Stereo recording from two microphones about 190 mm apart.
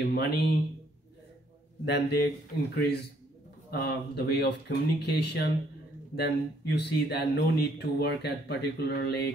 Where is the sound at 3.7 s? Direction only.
60° left (ahead or behind).